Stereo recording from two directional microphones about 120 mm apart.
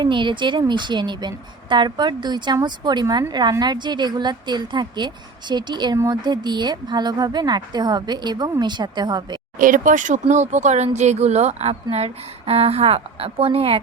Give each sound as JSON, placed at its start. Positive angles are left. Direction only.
{"t": 0.0, "sound": "a woman's voice", "side_deg": -40}
{"t": 9.6, "sound": "speech", "side_deg": -90}